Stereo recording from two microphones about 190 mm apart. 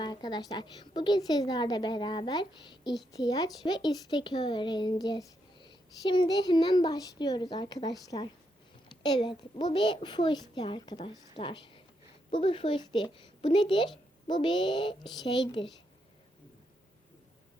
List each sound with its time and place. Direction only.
0.0 s a woman's voice: 20° left (ahead or behind)